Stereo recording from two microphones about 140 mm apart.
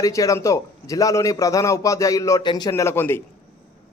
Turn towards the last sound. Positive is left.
turn(degrees=15)  # may be behind; listen again after turning